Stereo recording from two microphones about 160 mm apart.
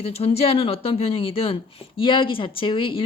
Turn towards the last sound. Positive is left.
turn(degrees=35)  # may be behind; listen again after turning